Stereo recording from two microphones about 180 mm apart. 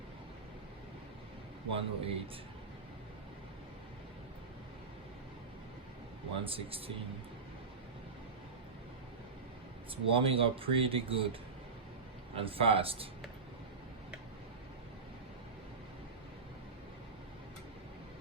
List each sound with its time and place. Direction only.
1.7 s speech: 30° right (ahead or behind)
6.4 s speech: 30° right (ahead or behind)
9.9 s speech: 30° right (ahead or behind)
12.4 s speech: 30° right (ahead or behind)